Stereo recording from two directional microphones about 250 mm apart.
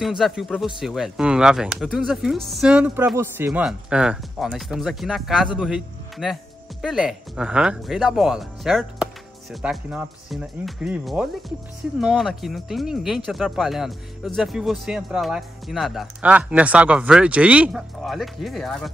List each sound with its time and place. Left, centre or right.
0.0 s a man's voice: centre